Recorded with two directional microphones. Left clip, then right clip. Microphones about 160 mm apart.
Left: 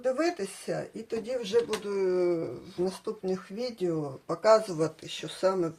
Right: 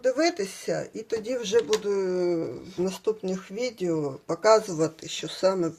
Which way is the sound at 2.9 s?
50° right (ahead or behind).